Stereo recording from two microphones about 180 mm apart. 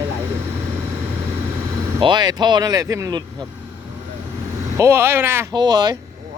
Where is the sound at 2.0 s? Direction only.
25° right (ahead or behind).